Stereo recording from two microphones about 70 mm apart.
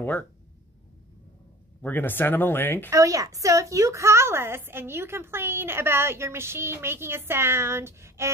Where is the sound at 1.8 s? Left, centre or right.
Left.